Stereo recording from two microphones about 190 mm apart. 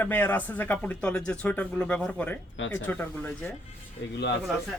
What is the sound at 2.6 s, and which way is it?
Speech, 80° left.